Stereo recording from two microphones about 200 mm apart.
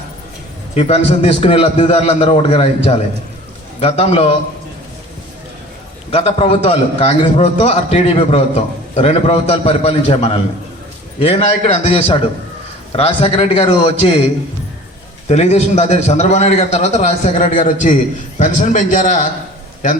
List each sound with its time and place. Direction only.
0.7 s a man's voice: 30° left (ahead or behind)
6.1 s a man's voice: 30° left (ahead or behind)
15.3 s a man's voice: 35° left (ahead or behind)